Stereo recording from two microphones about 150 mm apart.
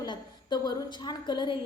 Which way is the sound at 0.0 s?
25° left (ahead or behind).